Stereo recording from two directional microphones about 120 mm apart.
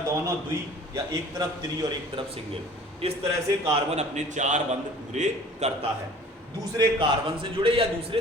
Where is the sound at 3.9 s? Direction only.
75° right (ahead or behind).